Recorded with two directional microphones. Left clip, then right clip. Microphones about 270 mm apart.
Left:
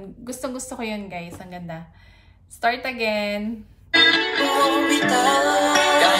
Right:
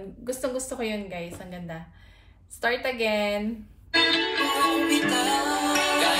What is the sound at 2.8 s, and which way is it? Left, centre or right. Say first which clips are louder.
Speech: left 2 dB; centre.